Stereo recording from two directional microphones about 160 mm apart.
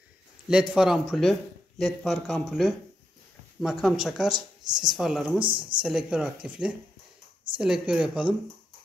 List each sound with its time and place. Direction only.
0.5 s a man's voice: 5° right (ahead or behind)
3.8 s a man's voice: centre (ahead or behind)
5.4 s speech: 30° right (ahead or behind)
5.8 s a man's voice: 5° right (ahead or behind)